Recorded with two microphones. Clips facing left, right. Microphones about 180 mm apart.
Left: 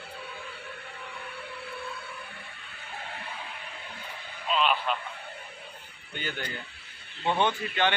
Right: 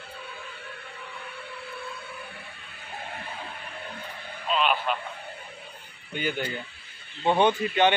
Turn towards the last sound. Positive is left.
turn(degrees=-20)  # may be behind; listen again after turning